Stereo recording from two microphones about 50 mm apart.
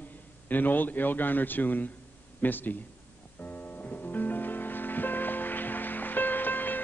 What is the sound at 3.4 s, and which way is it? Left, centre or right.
Music, left.